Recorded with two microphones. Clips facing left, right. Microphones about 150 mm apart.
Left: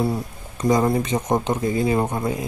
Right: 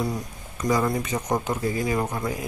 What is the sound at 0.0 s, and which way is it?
A man's voice, 30° left (ahead or behind).